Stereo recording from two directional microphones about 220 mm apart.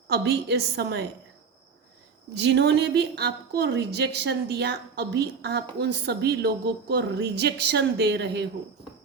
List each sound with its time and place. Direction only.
0.1 s a woman's voice: 45° right (ahead or behind)
2.3 s a woman's voice: 50° right (ahead or behind)